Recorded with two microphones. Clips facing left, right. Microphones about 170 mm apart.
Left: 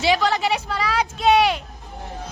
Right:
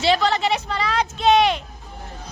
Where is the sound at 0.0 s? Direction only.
10° left (ahead or behind).